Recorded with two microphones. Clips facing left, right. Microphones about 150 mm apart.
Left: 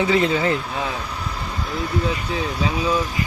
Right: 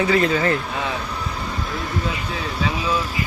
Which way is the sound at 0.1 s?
20° left (ahead or behind).